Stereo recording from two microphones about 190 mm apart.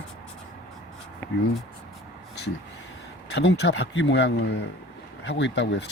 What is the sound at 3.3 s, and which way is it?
Speech, 65° left (ahead or behind).